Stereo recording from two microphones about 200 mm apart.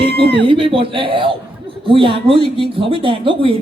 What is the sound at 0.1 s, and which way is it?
Speech, 55° right (ahead or behind).